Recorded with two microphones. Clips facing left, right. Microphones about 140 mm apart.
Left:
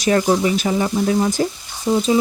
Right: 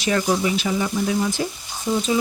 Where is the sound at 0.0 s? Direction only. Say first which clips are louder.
Left 4 dB; 40° left (ahead or behind).